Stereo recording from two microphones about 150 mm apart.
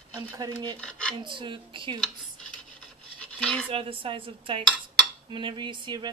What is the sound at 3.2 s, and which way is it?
Cutlery, 5° left (ahead or behind).